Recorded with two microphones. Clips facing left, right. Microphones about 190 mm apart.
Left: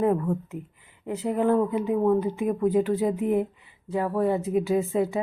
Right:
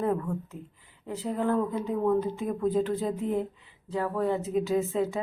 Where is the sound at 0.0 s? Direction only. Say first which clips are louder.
Left 5 dB; 20° left (ahead or behind).